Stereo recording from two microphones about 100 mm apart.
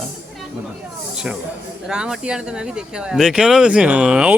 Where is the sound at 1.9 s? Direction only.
10° right (ahead or behind).